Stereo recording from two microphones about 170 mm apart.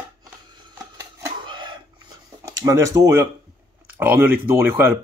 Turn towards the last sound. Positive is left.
turn(degrees=-10)  # may be behind; listen again after turning